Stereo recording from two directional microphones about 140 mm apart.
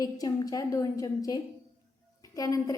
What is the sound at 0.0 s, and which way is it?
A woman's voice, 25° left (ahead or behind).